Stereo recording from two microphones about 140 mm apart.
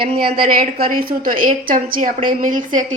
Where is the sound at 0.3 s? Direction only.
85° right.